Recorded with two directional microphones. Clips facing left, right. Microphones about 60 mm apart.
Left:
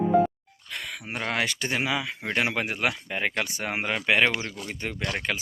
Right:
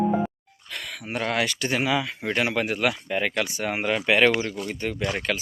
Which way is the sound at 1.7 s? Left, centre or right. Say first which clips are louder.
Right 3 dB; centre.